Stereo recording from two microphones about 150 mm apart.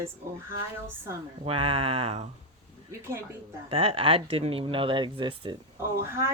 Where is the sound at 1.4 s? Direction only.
35° right (ahead or behind).